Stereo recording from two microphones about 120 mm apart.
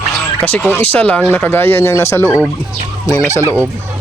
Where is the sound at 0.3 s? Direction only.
15° left (ahead or behind).